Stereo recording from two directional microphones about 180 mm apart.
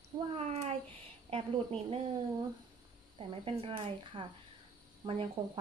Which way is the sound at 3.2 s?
30° right (ahead or behind).